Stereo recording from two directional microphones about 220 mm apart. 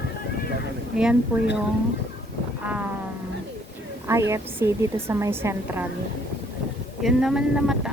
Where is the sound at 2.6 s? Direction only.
5° right (ahead or behind).